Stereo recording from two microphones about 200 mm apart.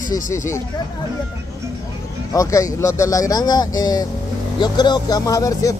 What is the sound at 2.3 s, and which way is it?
Speech, 15° left (ahead or behind).